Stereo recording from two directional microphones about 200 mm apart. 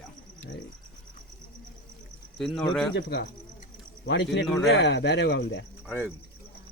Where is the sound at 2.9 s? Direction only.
60° left (ahead or behind).